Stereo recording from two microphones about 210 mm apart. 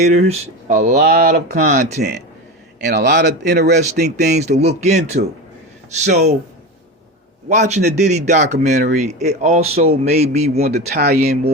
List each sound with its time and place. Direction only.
0.0 s speech: 30° right (ahead or behind)
0.9 s speech: 50° right (ahead or behind)
2.0 s speech: 55° right (ahead or behind)
4.3 s speech: 35° right (ahead or behind)
5.2 s speech: 40° right (ahead or behind)
7.5 s speech: 35° right (ahead or behind)
10.6 s speech: 50° right (ahead or behind)